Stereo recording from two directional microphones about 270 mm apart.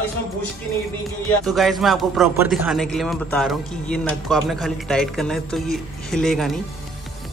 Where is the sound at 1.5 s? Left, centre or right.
Centre.